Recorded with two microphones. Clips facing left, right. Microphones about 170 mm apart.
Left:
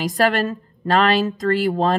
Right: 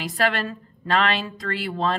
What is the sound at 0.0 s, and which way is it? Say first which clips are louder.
A woman's voice: left 5 dB; 40° left (ahead or behind).